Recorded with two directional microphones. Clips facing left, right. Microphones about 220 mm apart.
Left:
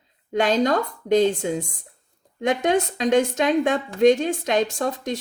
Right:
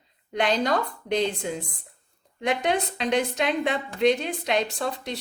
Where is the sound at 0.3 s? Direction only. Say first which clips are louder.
Left 4 dB; 45° left (ahead or behind).